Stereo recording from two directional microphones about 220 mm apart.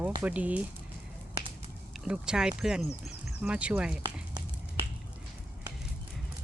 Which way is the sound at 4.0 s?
25° right (ahead or behind).